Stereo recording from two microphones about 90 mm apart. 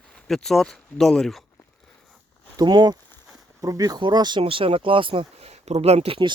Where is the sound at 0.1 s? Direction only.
5° left (ahead or behind).